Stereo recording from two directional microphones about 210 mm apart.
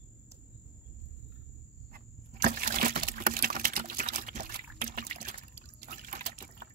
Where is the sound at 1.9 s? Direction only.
45° right (ahead or behind).